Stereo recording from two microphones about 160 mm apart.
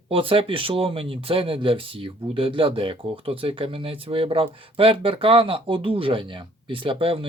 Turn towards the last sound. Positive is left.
turn(degrees=-35)  # may be behind; listen again after turning